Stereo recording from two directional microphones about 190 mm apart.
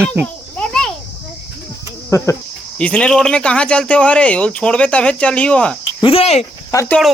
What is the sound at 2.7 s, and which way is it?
Speech, 5° left (ahead or behind).